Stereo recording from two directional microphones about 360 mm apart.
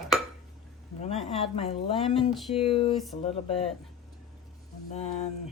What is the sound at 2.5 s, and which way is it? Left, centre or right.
Speech, centre.